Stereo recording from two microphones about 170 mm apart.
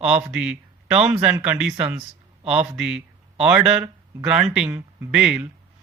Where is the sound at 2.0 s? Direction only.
35° right (ahead or behind).